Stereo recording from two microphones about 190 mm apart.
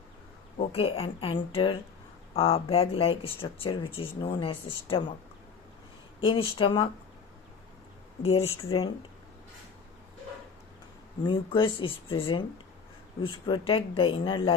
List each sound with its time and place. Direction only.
0.6 s speech: 30° left (ahead or behind)
6.1 s speech: 25° left (ahead or behind)
8.2 s speech: 30° left (ahead or behind)
11.3 s speech: 25° left (ahead or behind)